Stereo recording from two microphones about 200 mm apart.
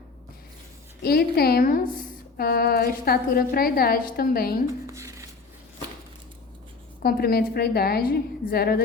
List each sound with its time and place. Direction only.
1.0 s a woman's voice: 50° left (ahead or behind)
4.6 s a sound: 15° right (ahead or behind)
7.0 s a woman's voice: 50° left (ahead or behind)